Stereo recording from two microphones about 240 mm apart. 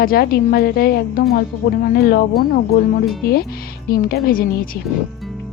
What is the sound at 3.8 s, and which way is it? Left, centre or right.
Speech, left.